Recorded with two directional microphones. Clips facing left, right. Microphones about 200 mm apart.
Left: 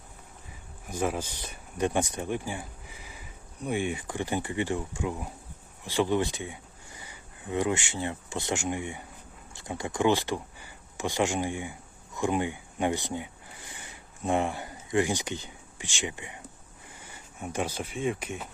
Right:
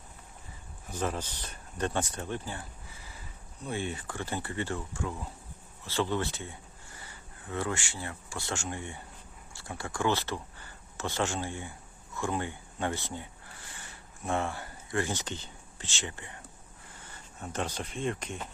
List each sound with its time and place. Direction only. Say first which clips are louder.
0.9 s speech: left 4 dB; 10° left (ahead or behind)